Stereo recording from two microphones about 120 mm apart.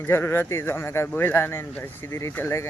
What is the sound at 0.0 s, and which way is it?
Speech, 20° left (ahead or behind).